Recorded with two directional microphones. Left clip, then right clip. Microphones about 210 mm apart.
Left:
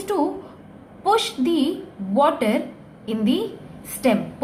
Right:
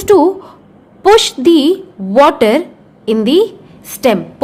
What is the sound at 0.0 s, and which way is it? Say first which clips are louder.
A woman's voice: right 14 dB; 45° right (ahead or behind).